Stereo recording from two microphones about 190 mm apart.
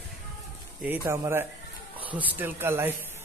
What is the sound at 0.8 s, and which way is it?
Speech, 10° right (ahead or behind).